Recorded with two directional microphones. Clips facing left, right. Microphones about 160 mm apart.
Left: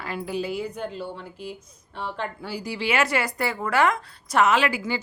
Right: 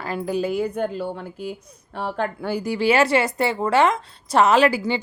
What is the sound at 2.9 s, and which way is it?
A woman's voice, 30° right (ahead or behind).